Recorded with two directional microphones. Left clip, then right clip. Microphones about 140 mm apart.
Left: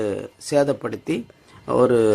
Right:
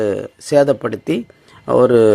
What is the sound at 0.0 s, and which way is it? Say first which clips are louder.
Speech: right 6 dB; 30° right (ahead or behind).